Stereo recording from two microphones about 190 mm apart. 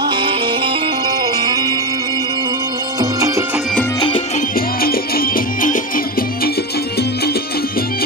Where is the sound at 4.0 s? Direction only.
25° left (ahead or behind).